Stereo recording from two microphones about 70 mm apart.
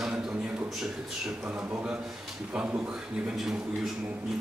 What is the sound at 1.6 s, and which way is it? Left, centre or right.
A man's voice, centre.